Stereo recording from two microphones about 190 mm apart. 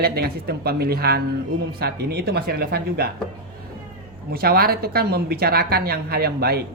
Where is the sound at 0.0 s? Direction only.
55° right (ahead or behind).